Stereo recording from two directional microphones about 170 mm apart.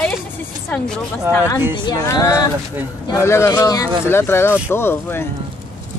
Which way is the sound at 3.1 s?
15° left (ahead or behind).